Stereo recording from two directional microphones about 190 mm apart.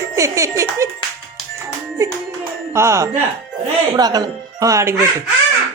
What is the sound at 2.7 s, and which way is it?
A child's voice, 15° right (ahead or behind).